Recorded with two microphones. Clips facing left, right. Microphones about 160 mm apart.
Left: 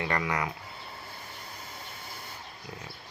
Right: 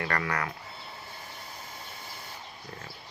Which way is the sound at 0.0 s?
20° left (ahead or behind).